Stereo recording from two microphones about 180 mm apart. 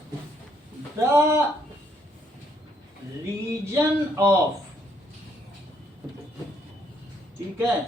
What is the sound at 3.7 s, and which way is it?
Speech, 15° right (ahead or behind).